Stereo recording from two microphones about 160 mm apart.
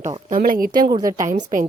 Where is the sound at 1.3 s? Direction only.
50° right (ahead or behind).